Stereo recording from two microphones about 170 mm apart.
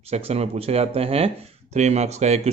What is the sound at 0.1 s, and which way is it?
Speech, 35° right (ahead or behind).